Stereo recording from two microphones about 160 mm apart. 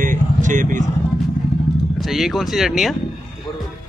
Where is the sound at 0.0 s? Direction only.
55° right (ahead or behind).